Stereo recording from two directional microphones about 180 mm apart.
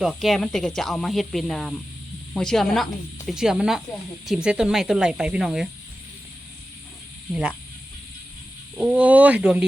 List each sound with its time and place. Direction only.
0.0 s speech: centre (ahead or behind)
8.7 s speech: 5° right (ahead or behind)